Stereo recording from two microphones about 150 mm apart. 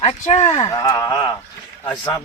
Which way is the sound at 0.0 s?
45° left (ahead or behind).